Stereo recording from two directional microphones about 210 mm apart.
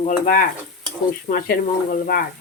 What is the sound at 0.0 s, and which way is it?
Stir, 40° left (ahead or behind).